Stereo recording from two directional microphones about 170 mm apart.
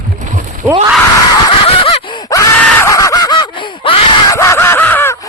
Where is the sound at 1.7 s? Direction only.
35° left (ahead or behind).